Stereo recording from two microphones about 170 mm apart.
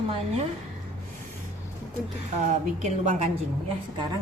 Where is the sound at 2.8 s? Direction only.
40° right (ahead or behind).